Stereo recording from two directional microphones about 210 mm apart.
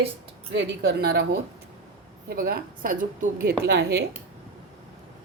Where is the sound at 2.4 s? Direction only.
45° right (ahead or behind).